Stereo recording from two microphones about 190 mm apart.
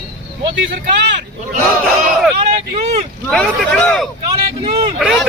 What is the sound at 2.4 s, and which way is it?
Speech, 35° right (ahead or behind).